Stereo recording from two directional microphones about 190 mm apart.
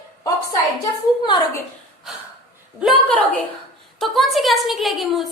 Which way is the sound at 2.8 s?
Centre (ahead or behind).